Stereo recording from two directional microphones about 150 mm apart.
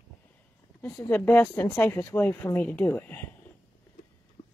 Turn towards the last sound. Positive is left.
turn(degrees=10)  # may be behind; listen again after turning